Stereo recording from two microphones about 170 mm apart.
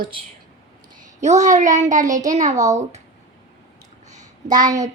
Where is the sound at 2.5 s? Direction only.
20° right (ahead or behind).